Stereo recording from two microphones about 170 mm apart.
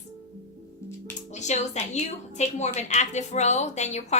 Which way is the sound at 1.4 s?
45° left (ahead or behind).